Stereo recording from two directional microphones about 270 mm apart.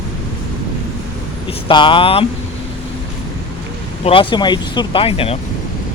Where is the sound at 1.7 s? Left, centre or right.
Centre.